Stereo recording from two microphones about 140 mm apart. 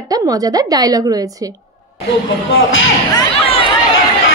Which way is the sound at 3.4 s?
40° left (ahead or behind).